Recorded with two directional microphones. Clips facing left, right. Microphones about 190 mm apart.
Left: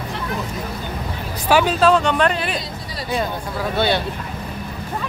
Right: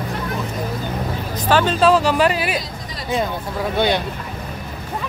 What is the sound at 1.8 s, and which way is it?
Speech, centre (ahead or behind).